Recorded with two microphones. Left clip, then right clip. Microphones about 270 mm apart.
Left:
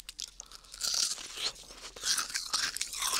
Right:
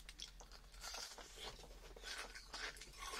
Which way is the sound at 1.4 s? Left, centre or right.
Left.